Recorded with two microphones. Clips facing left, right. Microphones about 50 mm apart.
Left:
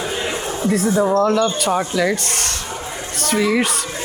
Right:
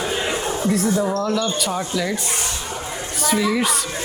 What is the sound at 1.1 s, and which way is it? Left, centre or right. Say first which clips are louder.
Speech: left 5 dB; left.